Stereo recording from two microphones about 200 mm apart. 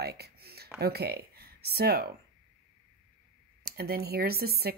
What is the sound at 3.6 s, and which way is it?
A woman's voice, 50° right (ahead or behind).